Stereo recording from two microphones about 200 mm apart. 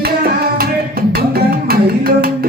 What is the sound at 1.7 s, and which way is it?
Music, 50° right (ahead or behind).